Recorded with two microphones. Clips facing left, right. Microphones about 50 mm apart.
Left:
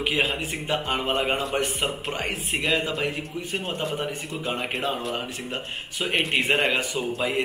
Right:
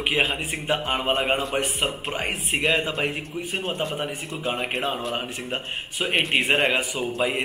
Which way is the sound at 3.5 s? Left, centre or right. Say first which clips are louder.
Right 1 dB; centre.